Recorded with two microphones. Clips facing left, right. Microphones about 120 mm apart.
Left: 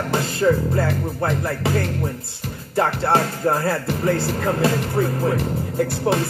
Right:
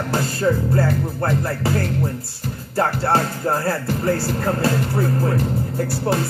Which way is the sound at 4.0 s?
15° left (ahead or behind).